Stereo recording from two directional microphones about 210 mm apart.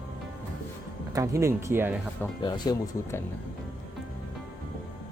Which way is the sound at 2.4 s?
20° left (ahead or behind).